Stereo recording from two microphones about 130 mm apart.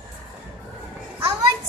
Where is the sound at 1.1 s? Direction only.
25° right (ahead or behind).